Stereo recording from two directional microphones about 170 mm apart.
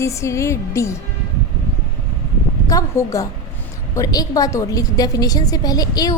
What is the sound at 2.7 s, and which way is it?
A woman's voice, 20° left (ahead or behind).